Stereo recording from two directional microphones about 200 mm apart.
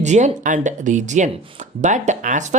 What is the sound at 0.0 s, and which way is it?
Speech, 35° right (ahead or behind).